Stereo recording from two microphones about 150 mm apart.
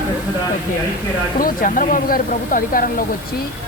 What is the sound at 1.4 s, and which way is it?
Speech, 65° left (ahead or behind).